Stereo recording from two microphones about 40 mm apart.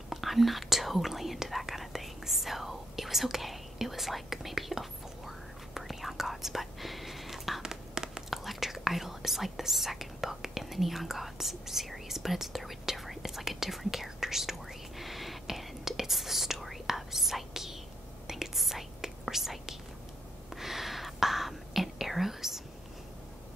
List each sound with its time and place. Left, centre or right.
0.1 s whispering: centre
7.6 s whispering: centre
8.3 s whispering: centre